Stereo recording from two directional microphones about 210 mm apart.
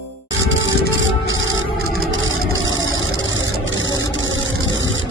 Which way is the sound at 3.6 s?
65° right (ahead or behind).